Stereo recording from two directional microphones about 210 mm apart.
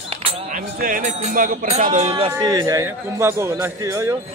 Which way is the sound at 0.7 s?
40° right (ahead or behind).